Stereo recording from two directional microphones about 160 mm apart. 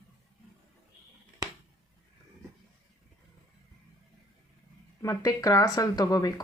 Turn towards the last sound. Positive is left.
turn(degrees=25)  # may be behind; listen again after turning